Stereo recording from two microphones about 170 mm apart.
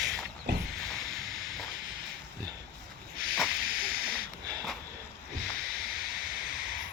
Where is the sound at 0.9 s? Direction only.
Centre (ahead or behind).